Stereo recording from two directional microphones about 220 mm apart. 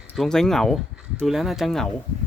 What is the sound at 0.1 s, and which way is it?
Speech, centre (ahead or behind).